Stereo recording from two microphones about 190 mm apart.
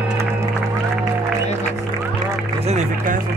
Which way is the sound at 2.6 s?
35° right (ahead or behind).